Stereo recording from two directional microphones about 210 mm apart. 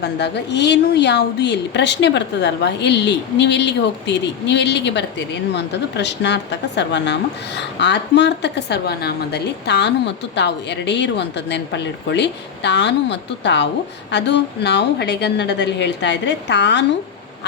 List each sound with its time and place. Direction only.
0.0 s a woman's voice: 55° left (ahead or behind)